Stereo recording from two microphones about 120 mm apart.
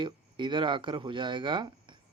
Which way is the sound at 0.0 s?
40° right (ahead or behind).